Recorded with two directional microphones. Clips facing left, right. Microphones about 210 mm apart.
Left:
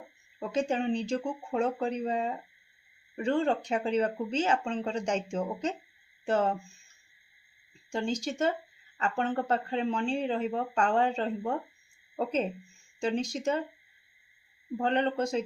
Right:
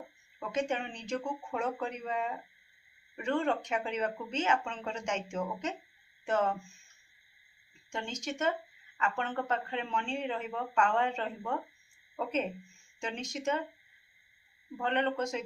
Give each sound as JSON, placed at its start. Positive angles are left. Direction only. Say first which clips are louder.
{"t": 0.3, "sound": "speech", "louder": "left 4 dB", "side_deg": 30}
{"t": 7.9, "sound": "speech", "louder": "left 7 dB", "side_deg": 35}
{"t": 14.8, "sound": "speech", "louder": "left 3 dB", "side_deg": 35}